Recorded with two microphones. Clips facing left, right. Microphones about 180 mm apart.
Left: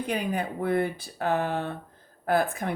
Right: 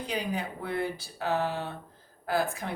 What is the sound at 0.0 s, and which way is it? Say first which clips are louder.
Speech: left 4 dB; 55° left (ahead or behind).